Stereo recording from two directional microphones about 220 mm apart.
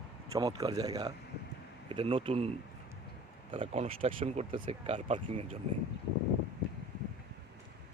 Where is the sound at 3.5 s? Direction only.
25° right (ahead or behind).